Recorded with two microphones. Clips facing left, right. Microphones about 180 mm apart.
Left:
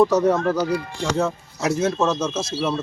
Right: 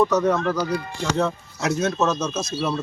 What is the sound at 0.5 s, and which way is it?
Speech, 10° left (ahead or behind).